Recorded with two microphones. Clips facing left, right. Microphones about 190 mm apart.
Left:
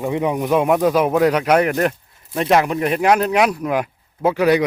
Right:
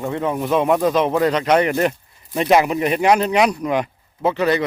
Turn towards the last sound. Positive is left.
turn(degrees=10)  # may be behind; listen again after turning